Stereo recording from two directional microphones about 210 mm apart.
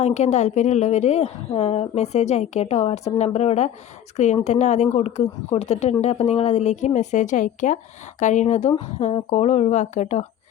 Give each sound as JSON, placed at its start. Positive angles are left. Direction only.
{"t": 0.0, "sound": "a woman's voice", "side_deg": 30}